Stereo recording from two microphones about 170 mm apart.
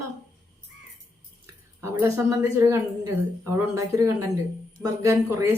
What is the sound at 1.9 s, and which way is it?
A woman's voice, 15° right (ahead or behind).